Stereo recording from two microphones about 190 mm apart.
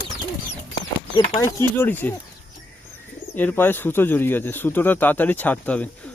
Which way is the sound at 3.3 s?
10° left (ahead or behind).